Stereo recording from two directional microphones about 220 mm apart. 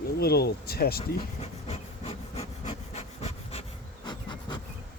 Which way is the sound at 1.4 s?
30° left (ahead or behind).